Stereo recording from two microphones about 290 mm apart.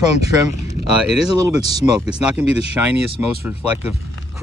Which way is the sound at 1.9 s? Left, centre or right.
Centre.